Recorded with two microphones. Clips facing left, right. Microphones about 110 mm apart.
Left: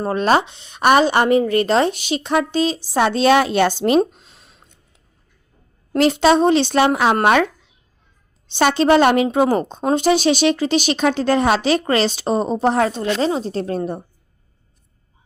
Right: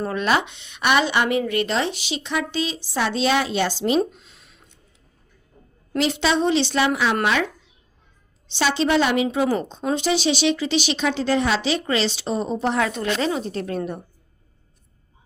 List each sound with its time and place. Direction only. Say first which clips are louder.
0.0 s a woman's voice: left 5 dB; 35° left (ahead or behind); by 4.0 s 55° left (ahead or behind)
4.2 s a sound: left 2 dB; 35° left (ahead or behind)
5.9 s a woman's voice: left 7 dB; 45° left (ahead or behind)
8.4 s a woman's voice: left 6 dB; 50° left (ahead or behind); by 14.0 s 30° left (ahead or behind)